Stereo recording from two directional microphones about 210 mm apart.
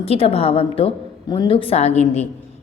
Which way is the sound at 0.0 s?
30° left (ahead or behind).